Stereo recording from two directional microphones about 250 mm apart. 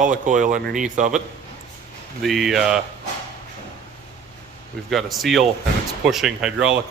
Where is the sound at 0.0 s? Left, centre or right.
Right.